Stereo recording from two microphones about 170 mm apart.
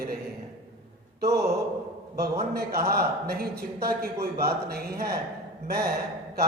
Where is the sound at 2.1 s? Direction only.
65° right (ahead or behind).